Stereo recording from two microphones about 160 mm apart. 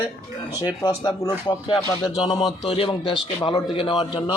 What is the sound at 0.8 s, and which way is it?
A man's voice, 25° left (ahead or behind).